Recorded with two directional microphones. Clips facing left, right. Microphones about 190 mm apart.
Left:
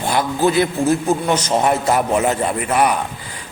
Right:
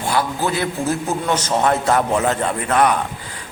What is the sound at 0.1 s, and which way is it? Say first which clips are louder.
A man's voice: left 4 dB; 20° left (ahead or behind).